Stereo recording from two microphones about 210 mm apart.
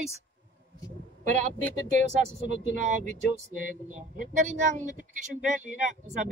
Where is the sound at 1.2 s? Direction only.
40° right (ahead or behind).